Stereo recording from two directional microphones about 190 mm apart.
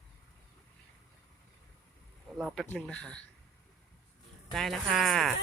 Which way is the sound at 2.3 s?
Centre (ahead or behind).